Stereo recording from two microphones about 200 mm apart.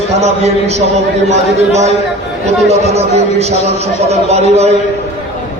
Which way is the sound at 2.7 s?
30° right (ahead or behind).